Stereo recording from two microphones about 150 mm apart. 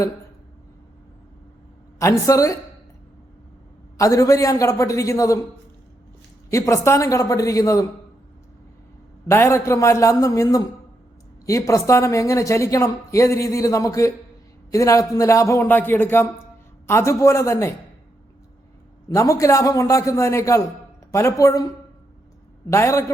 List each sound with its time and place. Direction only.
2.0 s a woman's voice: 20° left (ahead or behind)
3.9 s a woman's voice: 20° left (ahead or behind)
6.5 s a woman's voice: 20° left (ahead or behind)
9.2 s a woman's voice: 15° left (ahead or behind)
19.0 s a woman's voice: 20° left (ahead or behind)
22.7 s a woman's voice: 20° left (ahead or behind)